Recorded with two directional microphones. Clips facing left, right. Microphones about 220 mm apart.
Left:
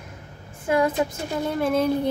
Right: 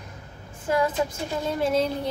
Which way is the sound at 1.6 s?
55° left (ahead or behind).